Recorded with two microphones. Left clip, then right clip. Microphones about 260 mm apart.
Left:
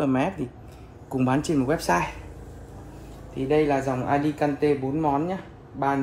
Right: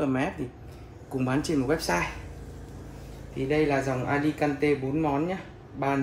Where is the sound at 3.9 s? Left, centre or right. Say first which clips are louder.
Left 3 dB; left.